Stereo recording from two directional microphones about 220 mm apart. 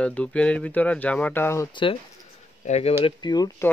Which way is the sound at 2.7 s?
30° left (ahead or behind).